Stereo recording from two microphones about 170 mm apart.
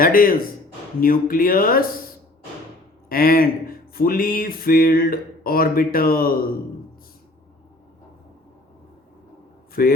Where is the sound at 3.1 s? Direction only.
60° left (ahead or behind).